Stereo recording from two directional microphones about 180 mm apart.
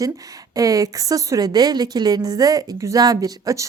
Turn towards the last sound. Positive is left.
turn(degrees=-20)  # may be behind; listen again after turning